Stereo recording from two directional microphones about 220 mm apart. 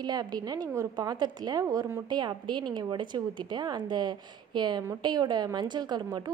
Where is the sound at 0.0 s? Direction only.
20° right (ahead or behind).